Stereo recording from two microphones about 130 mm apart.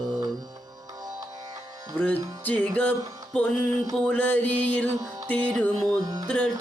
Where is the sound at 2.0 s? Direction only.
15° left (ahead or behind).